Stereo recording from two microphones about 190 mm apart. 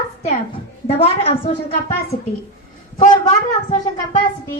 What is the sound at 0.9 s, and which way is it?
Speech, 30° left (ahead or behind).